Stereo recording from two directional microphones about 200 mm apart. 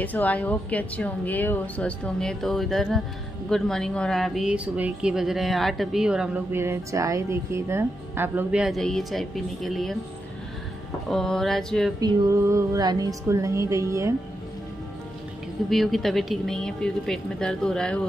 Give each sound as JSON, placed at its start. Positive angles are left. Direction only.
{"t": 0.0, "sound": "speech", "side_deg": 10}
{"t": 11.1, "sound": "speech", "side_deg": 0}
{"t": 12.0, "sound": "speech", "side_deg": -15}
{"t": 15.7, "sound": "speech", "side_deg": 0}